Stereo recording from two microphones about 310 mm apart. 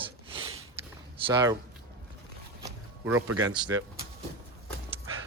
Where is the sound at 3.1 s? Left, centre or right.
Right.